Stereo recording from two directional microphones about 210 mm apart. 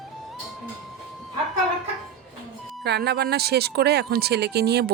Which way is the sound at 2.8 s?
50° right (ahead or behind).